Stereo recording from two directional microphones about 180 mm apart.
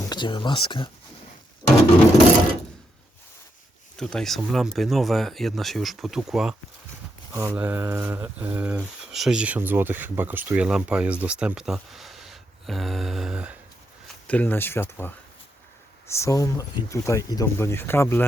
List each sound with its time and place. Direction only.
0.0 s speech: 25° left (ahead or behind)
1.6 s a sound: 15° left (ahead or behind)
3.9 s speech: 5° left (ahead or behind)
14.3 s speech: 10° left (ahead or behind)